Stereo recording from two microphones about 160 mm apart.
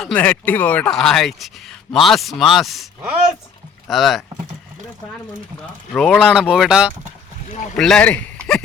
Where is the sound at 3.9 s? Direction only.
Centre (ahead or behind).